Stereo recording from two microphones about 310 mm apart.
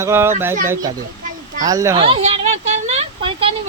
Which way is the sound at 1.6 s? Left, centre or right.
Centre.